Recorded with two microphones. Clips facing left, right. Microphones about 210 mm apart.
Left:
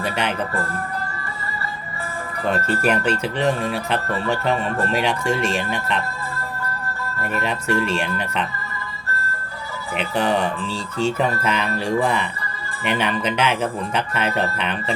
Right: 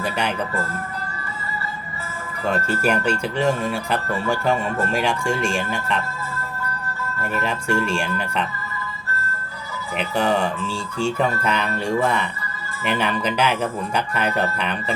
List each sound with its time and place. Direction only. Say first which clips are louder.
2.5 s speech: left 1 dB; centre (ahead or behind)
7.7 s speech: left 1 dB; 5° left (ahead or behind)
10.2 s speech: even; 5° left (ahead or behind)
10.7 s speech: left 1 dB; 35° left (ahead or behind)
11.2 s speech: even; 5° left (ahead or behind)